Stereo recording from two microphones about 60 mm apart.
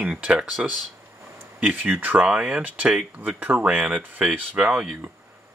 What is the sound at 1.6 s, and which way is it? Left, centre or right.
Speech, right.